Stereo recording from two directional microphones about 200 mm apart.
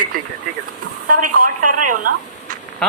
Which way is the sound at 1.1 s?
45° right (ahead or behind).